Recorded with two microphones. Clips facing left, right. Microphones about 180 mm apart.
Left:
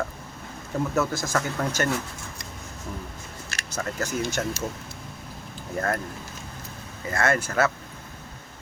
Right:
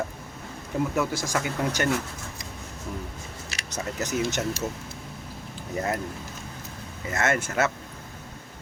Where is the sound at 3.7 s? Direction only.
20° right (ahead or behind).